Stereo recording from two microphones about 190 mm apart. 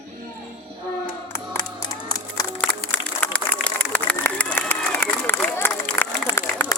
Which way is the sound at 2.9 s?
5° left (ahead or behind).